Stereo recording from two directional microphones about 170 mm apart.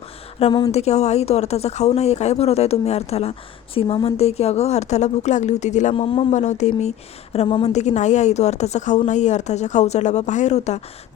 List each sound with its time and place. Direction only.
0.3 s speech: 35° left (ahead or behind)
6.3 s a woman's voice: 45° left (ahead or behind)